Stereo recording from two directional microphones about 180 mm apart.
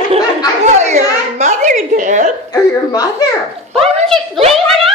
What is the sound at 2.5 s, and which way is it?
Speech, 20° left (ahead or behind).